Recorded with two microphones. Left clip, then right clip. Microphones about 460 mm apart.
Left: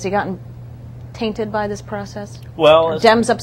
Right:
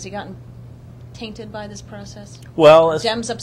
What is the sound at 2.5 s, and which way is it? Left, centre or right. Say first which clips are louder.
Speech: right 2 dB; right.